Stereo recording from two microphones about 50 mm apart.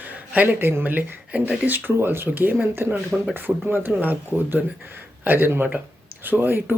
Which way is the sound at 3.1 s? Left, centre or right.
Centre.